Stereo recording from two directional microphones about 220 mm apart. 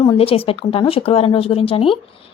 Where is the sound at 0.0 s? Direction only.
25° left (ahead or behind).